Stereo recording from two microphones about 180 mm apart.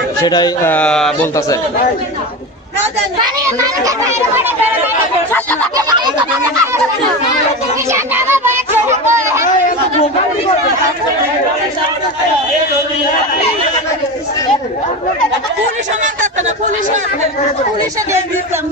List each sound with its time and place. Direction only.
0.2 s speech: 25° left (ahead or behind)
0.7 s speech: 5° left (ahead or behind)
3.8 s a child's voice: 15° right (ahead or behind)
5.3 s a sound: 10° left (ahead or behind)
5.8 s a sound: 25° right (ahead or behind)
7.9 s music: 15° right (ahead or behind)